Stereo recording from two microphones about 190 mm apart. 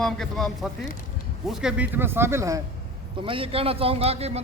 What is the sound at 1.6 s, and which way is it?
Speech, 10° right (ahead or behind).